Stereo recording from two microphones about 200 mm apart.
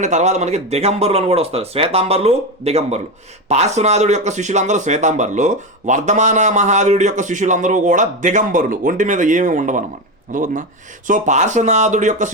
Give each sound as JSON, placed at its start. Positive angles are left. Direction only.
{"t": 0.0, "sound": "speech", "side_deg": -35}